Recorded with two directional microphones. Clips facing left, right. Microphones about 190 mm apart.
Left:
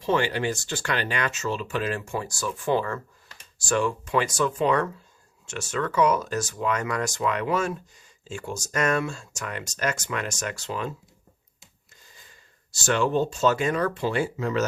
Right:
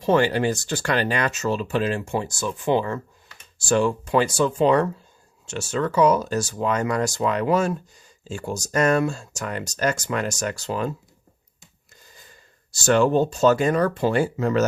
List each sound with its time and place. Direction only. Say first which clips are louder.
0.0 s speech: right 5 dB; 40° right (ahead or behind); by 3.0 s 20° right (ahead or behind)
3.6 s speech: right 4 dB; 30° right (ahead or behind)
12.7 s speech: right 5 dB; 40° right (ahead or behind)